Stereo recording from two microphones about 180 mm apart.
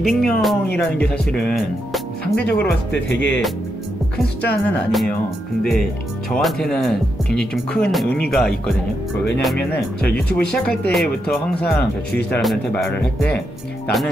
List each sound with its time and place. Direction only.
0.0 s speech: centre (ahead or behind)
2.3 s speech: 70° left (ahead or behind)
2.9 s speech: 80° left
4.4 s speech: 5° left (ahead or behind)
10.1 s speech: 5° left (ahead or behind)